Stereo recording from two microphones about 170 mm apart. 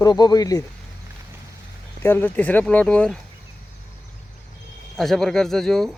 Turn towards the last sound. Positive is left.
turn(degrees=0)  # may be behind; listen again after turning